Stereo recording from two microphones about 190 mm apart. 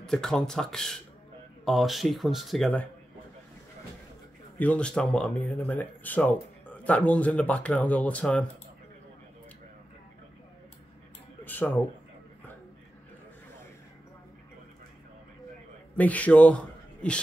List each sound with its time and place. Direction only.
0.0 s speech: 5° left (ahead or behind)
4.6 s speech: 5° left (ahead or behind)
11.4 s speech: 10° left (ahead or behind)
16.0 s a man's voice: 10° left (ahead or behind)